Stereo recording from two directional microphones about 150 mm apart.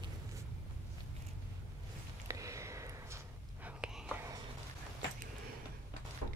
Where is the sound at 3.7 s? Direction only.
5° right (ahead or behind).